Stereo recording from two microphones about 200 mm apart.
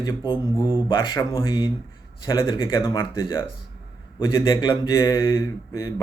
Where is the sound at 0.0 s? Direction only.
25° left (ahead or behind).